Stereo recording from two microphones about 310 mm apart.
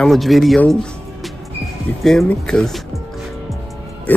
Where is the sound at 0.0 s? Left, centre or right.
Centre.